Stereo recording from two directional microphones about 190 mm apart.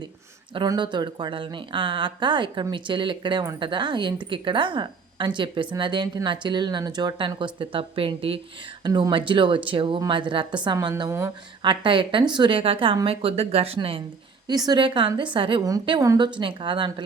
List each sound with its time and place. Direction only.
0.5 s speech: 25° right (ahead or behind)